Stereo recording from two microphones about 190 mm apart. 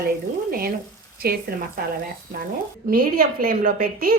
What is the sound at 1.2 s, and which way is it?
Speech, 55° right (ahead or behind).